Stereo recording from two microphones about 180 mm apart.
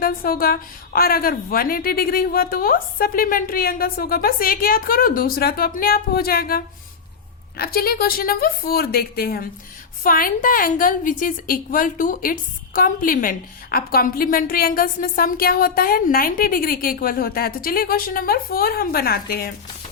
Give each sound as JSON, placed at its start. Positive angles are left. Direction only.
{"t": 0.0, "sound": "a woman's voice", "side_deg": 55}